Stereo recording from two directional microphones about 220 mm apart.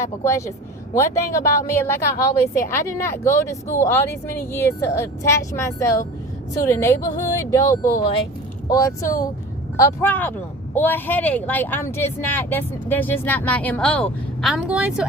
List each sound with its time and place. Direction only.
0.0 s speech: 15° left (ahead or behind); by 15.0 s 5° right (ahead or behind)